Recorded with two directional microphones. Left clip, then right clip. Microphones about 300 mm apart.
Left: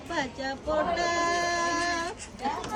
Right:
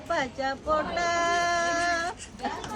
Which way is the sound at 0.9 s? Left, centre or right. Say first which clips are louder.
Right 1 dB; centre.